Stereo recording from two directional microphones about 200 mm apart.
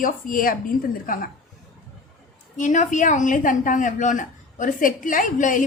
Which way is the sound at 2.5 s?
40° left (ahead or behind).